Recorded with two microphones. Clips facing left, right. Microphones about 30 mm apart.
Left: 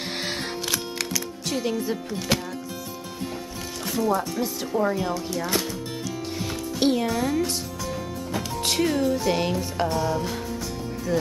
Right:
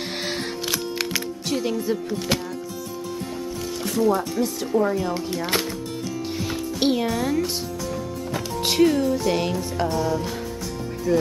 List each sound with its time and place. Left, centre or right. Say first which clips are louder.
1.5 s speech: right 2 dB; centre
3.8 s music: right 2 dB; centre
4.2 s speech: right 3 dB; centre
5.1 s speech: right 1 dB; right
6.8 s speech: even; centre